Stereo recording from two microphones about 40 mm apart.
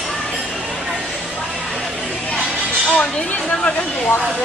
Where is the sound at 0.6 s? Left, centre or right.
Centre.